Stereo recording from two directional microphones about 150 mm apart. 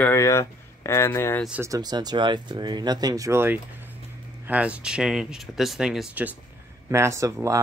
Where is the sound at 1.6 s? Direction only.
25° right (ahead or behind).